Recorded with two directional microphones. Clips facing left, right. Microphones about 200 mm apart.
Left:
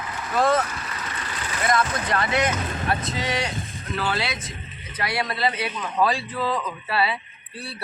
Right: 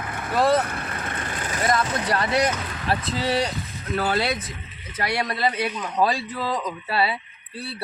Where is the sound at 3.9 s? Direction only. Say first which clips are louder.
Right 4 dB; 50° right (ahead or behind).